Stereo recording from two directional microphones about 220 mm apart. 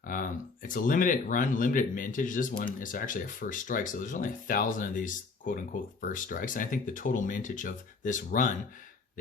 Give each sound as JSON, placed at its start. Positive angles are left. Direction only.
{"t": 0.0, "sound": "speech", "side_deg": 40}